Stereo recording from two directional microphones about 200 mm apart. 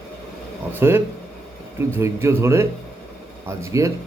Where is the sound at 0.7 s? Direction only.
10° right (ahead or behind).